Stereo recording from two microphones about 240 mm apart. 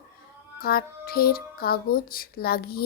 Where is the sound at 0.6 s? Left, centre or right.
Left.